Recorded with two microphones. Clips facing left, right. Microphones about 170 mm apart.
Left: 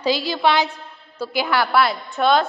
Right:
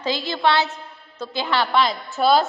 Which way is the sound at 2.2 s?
5° right (ahead or behind).